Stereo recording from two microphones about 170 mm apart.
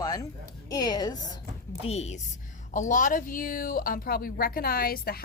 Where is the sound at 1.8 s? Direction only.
40° left (ahead or behind).